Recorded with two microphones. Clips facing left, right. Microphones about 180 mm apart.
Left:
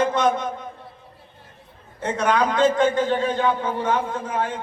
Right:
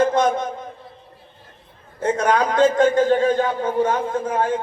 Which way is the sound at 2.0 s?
45° right (ahead or behind).